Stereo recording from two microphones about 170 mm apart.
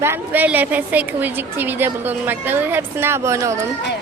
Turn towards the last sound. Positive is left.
turn(degrees=-15)  # may be behind; listen again after turning